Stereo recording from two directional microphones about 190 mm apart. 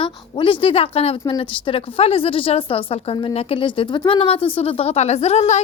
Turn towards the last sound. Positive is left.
turn(degrees=35)  # may be behind; listen again after turning